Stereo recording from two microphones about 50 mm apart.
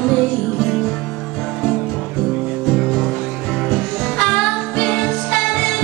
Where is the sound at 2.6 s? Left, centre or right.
Centre.